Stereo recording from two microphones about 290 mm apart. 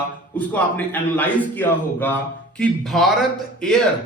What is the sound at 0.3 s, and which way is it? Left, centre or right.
A man's voice, centre.